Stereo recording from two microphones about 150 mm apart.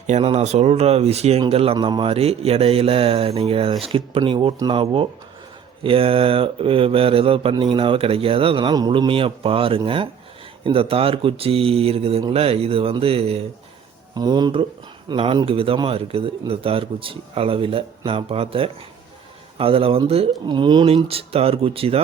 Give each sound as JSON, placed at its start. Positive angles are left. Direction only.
{"t": 0.1, "sound": "speech", "side_deg": -45}
{"t": 14.1, "sound": "speech", "side_deg": -25}